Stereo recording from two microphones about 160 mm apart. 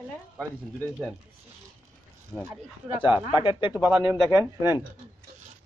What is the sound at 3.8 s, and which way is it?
Speech, 15° right (ahead or behind).